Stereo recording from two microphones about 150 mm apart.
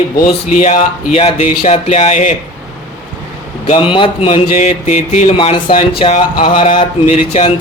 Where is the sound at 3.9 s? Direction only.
35° left (ahead or behind).